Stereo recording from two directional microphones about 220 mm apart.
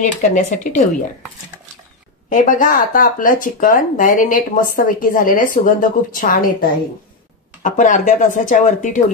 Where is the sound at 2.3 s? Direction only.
35° left (ahead or behind).